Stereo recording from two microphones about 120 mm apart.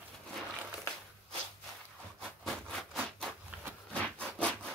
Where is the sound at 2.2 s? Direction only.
5° left (ahead or behind).